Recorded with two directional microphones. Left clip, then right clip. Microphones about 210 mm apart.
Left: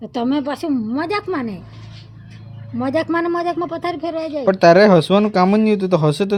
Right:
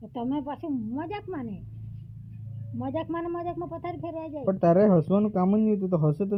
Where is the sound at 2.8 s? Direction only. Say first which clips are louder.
Left 12 dB; 70° left (ahead or behind).